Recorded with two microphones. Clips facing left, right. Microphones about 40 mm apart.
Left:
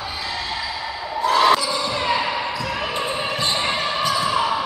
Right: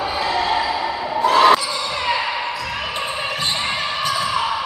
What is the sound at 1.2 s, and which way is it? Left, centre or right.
Basketball bounce, right.